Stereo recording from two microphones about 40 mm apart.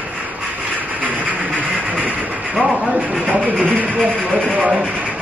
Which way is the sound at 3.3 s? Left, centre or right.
Right.